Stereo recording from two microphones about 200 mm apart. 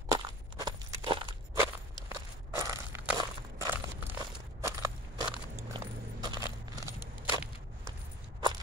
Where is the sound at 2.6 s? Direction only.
15° right (ahead or behind).